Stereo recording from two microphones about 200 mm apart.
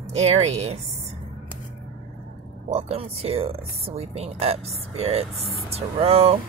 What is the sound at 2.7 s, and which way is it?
Speech, 30° right (ahead or behind).